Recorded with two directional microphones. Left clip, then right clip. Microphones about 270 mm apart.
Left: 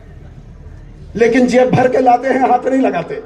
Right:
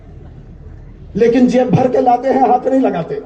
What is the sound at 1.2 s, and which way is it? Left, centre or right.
A man's voice, centre.